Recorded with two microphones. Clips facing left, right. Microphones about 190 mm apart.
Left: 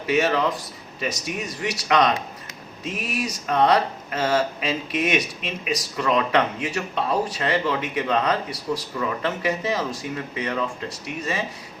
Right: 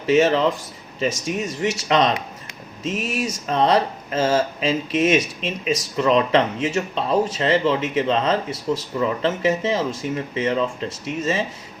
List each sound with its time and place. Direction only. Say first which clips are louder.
0.0 s speech: right 4 dB; 25° right (ahead or behind)